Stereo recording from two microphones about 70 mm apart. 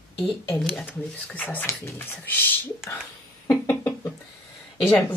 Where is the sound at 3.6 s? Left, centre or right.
Left.